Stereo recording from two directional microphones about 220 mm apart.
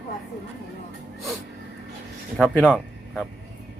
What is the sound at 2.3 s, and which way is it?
Speech, centre (ahead or behind).